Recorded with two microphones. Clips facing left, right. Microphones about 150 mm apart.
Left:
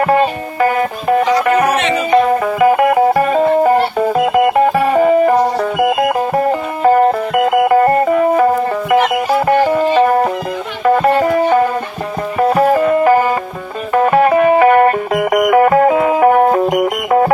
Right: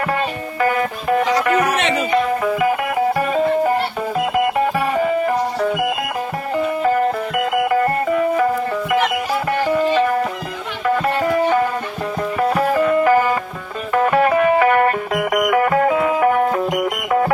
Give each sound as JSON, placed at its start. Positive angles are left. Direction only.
{"t": 0.0, "sound": "music", "side_deg": 35}
{"t": 2.2, "sound": "music", "side_deg": 55}
{"t": 9.5, "sound": "music", "side_deg": 45}
{"t": 12.4, "sound": "music", "side_deg": 35}